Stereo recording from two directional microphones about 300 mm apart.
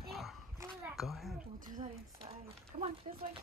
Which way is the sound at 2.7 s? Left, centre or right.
Right.